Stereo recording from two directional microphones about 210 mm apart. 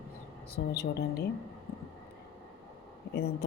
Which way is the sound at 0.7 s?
50° left (ahead or behind).